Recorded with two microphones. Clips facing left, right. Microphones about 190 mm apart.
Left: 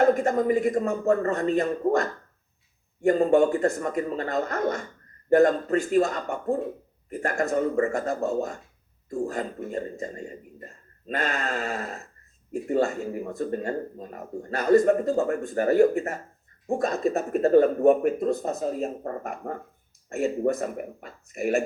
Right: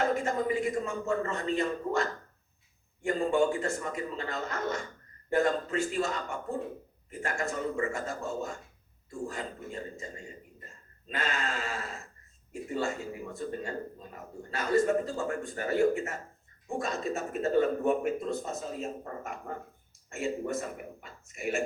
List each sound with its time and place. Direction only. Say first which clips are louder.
0.0 s speech: left 8 dB; 45° left (ahead or behind)
17.3 s speech: left 8 dB; 55° left (ahead or behind)
20.4 s speech: left 8 dB; 55° left (ahead or behind)